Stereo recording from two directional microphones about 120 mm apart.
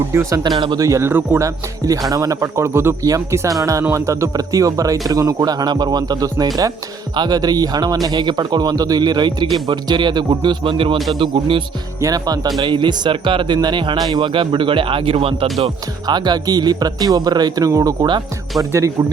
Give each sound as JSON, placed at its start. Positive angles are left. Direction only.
{"t": 0.1, "sound": "speech", "side_deg": -25}
{"t": 1.5, "sound": "speech", "side_deg": -30}
{"t": 10.9, "sound": "a man's voice", "side_deg": 0}
{"t": 11.2, "sound": "speech", "side_deg": -45}
{"t": 11.9, "sound": "speech", "side_deg": -30}
{"t": 16.0, "sound": "speech", "side_deg": -35}